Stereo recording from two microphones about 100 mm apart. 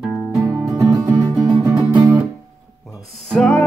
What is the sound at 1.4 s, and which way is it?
Music, 35° right (ahead or behind).